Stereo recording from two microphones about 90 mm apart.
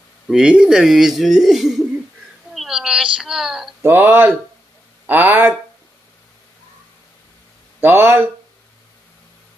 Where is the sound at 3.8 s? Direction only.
25° right (ahead or behind).